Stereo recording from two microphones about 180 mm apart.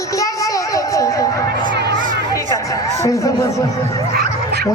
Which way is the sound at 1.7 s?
70° right (ahead or behind).